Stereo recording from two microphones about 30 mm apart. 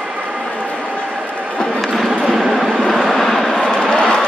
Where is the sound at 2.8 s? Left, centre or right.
Centre.